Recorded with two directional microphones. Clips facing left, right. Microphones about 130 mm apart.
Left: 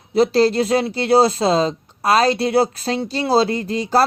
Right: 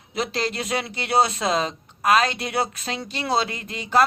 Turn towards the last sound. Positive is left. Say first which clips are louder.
# left 4 dB
turn(degrees=35)  # may be behind; listen again after turning